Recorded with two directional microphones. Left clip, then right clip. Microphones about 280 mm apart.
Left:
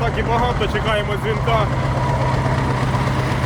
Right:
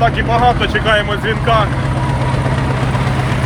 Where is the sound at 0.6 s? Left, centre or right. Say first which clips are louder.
Right 6 dB; centre.